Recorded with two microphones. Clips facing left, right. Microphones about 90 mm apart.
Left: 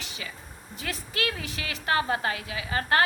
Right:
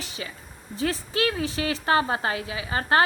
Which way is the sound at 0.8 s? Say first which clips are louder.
Right 7 dB; 30° right (ahead or behind).